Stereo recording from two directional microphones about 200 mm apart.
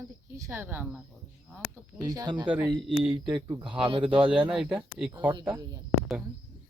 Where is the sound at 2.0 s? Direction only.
20° right (ahead or behind).